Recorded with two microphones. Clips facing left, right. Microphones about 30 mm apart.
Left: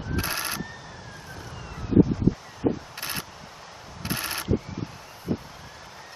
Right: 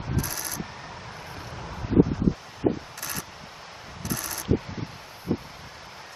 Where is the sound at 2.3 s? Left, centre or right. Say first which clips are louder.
Left 1 dB; centre.